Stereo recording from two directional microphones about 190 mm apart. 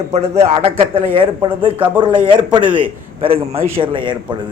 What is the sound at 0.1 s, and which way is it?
A man's voice, 35° right (ahead or behind).